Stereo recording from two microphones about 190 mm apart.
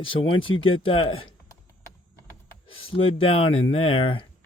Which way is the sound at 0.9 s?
30° left (ahead or behind).